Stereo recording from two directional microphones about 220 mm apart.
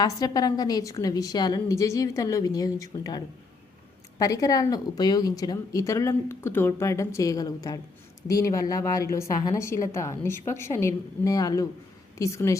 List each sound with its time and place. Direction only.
0.0 s a woman's voice: 15° left (ahead or behind)